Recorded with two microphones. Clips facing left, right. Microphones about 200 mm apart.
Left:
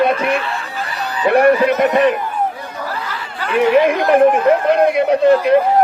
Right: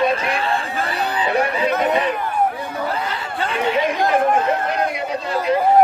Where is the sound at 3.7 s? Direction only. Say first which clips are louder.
Left 6 dB; 60° left (ahead or behind).